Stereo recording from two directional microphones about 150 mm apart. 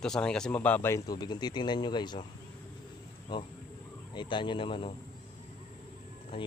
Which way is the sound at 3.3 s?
30° left (ahead or behind).